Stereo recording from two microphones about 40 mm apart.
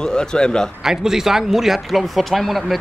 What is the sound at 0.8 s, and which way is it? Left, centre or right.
Speech, centre.